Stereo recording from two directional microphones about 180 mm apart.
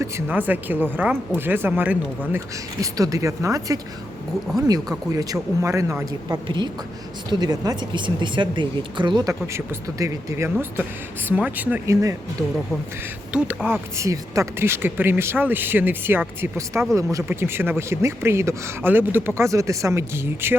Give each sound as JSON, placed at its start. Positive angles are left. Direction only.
{"t": 0.0, "sound": "speech", "side_deg": -10}